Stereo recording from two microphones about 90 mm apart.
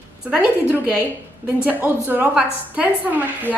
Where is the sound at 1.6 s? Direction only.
20° right (ahead or behind).